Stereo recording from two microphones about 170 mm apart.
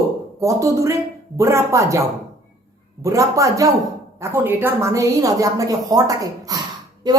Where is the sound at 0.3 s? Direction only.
20° right (ahead or behind).